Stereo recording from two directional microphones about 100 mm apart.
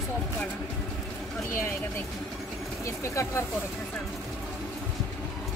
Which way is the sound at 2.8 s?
30° left (ahead or behind).